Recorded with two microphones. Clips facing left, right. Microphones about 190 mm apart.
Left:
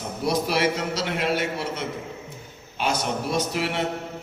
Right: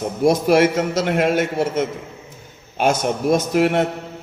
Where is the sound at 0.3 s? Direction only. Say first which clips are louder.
Right 8 dB; 50° right (ahead or behind).